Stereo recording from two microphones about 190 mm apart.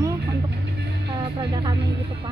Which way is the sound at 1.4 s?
25° right (ahead or behind).